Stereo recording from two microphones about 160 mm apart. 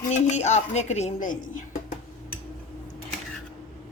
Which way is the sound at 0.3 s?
45° left (ahead or behind).